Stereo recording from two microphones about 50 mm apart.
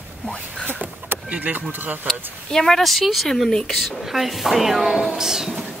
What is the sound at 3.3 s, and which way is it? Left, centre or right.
Speech, centre.